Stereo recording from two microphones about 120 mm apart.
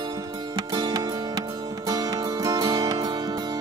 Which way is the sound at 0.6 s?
35° right (ahead or behind).